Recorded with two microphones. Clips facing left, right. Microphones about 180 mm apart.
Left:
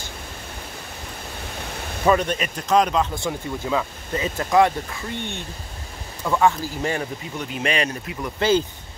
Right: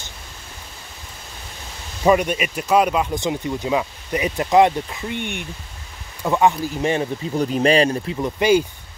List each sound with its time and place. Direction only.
2.0 s speech: 10° right (ahead or behind)
3.2 s speech: 20° right (ahead or behind)
7.3 s speech: 35° right (ahead or behind)
8.4 s speech: 15° right (ahead or behind)